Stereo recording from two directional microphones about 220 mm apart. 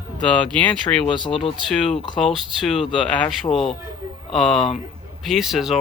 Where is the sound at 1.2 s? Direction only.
25° left (ahead or behind).